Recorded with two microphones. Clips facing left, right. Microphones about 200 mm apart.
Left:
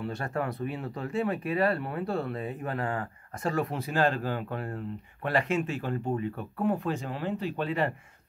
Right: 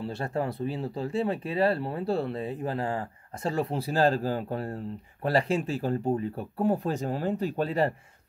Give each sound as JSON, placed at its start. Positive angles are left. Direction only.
{"t": 0.0, "sound": "speech", "side_deg": -30}